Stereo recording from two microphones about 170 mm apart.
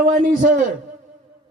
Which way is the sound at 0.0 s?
50° right (ahead or behind).